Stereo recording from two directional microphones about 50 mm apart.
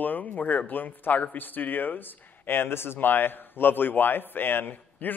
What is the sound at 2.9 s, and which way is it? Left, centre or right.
Speech, left.